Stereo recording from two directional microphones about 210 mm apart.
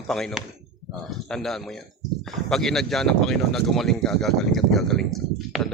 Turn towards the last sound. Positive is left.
turn(degrees=0)  # may be behind; listen again after turning